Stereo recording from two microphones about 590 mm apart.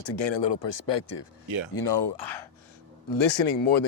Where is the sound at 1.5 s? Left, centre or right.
Right.